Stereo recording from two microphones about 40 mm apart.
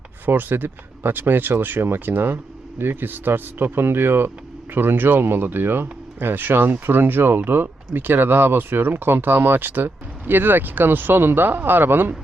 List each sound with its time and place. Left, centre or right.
0.3 s speech: right